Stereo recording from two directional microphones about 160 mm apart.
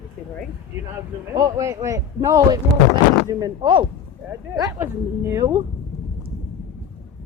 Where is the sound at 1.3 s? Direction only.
25° right (ahead or behind).